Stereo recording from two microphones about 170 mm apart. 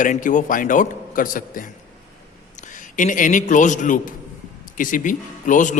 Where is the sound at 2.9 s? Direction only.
50° left (ahead or behind).